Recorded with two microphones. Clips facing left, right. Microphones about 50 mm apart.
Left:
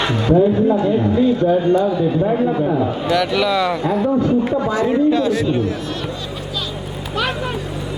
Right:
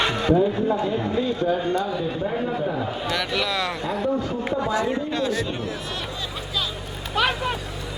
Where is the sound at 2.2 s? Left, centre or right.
Centre.